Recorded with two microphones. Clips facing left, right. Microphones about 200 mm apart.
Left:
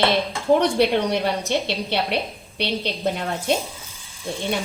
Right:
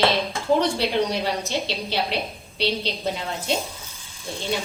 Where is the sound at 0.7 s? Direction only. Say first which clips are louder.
Left 4 dB; 60° left (ahead or behind).